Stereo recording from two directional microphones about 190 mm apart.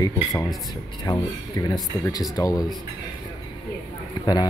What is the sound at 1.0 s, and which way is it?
Speech, 20° left (ahead or behind).